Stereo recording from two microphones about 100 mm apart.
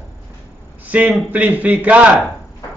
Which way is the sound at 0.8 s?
15° right (ahead or behind).